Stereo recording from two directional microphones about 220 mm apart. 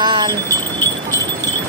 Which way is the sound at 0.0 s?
20° right (ahead or behind).